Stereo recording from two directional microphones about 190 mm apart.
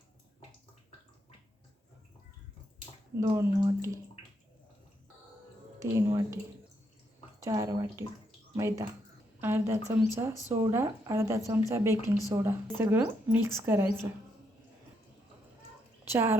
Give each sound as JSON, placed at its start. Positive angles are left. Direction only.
{"t": 3.2, "sound": "a woman's voice", "side_deg": -15}
{"t": 5.8, "sound": "a woman's voice", "side_deg": -15}
{"t": 7.4, "sound": "a woman's voice", "side_deg": -20}
{"t": 16.0, "sound": "speech", "side_deg": -10}